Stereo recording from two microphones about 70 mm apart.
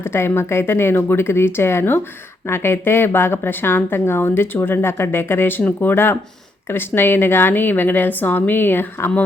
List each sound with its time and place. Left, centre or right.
0.0 s a woman's voice: left